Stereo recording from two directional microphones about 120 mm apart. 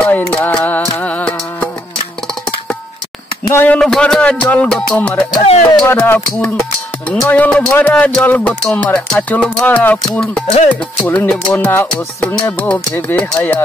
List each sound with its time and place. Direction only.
0.0 s music: 20° left (ahead or behind)
3.4 s speech: 15° left (ahead or behind)
10.1 s music: 5° left (ahead or behind)
10.4 s music: 60° left (ahead or behind)
10.7 s speech: 10° left (ahead or behind)
12.3 s music: 20° left (ahead or behind)
13.1 s speech: 15° left (ahead or behind)